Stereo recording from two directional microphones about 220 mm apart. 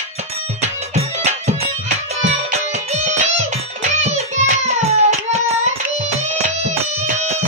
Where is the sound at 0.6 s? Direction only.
30° right (ahead or behind).